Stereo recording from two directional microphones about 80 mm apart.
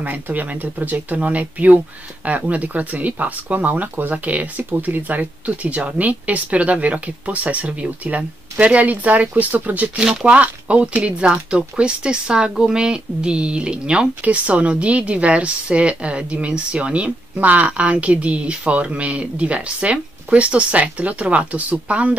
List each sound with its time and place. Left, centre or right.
0.0 s speech: right